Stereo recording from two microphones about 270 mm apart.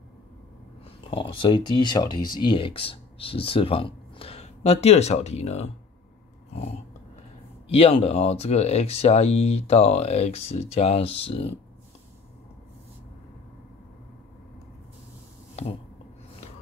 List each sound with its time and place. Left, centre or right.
1.1 s speech: centre
7.2 s speech: left
15.5 s a sound: left